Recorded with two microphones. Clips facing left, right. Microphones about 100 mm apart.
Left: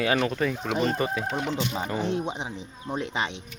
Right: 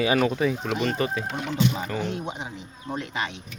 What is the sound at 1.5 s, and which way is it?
Speech, 25° left (ahead or behind).